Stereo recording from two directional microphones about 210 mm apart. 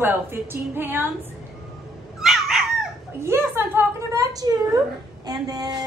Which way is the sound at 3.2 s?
10° right (ahead or behind).